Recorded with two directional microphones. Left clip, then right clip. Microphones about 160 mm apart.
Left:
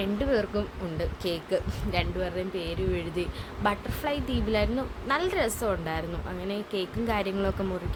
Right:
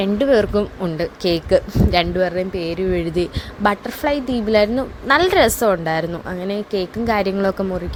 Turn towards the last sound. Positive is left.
turn(degrees=-35)  # may be behind; listen again after turning